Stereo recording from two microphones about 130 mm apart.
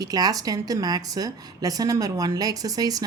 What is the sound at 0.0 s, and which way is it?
A woman's voice, 30° right (ahead or behind).